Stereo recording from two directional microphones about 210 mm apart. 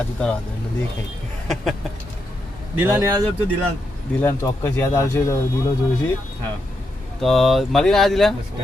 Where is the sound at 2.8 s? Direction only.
10° right (ahead or behind).